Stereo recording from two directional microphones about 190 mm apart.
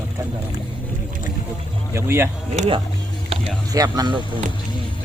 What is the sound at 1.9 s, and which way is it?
Speech, 15° right (ahead or behind).